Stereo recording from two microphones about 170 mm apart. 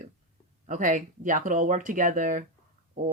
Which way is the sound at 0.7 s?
50° right (ahead or behind).